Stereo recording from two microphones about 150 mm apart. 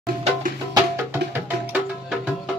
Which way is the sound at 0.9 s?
15° right (ahead or behind).